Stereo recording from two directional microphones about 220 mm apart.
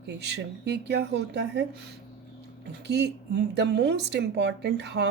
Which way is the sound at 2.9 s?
50° right (ahead or behind).